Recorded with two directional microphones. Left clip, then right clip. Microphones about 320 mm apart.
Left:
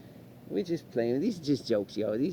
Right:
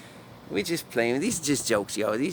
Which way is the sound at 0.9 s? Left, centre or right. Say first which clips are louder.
Right 4 dB; right.